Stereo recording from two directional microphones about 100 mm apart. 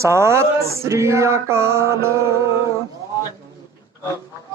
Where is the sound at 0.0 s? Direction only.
30° right (ahead or behind).